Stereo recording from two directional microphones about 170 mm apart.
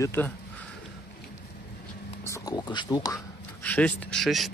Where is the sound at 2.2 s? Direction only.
20° left (ahead or behind).